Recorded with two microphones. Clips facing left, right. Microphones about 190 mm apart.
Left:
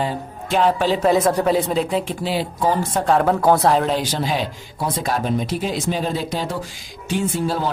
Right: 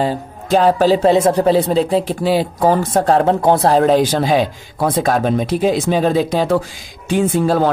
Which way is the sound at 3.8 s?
50° right (ahead or behind).